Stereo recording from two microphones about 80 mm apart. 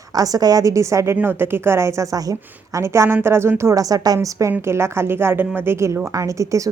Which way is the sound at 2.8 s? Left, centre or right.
Right.